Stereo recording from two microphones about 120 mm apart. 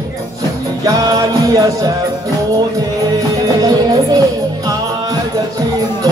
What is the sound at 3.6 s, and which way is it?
Music, 30° right (ahead or behind).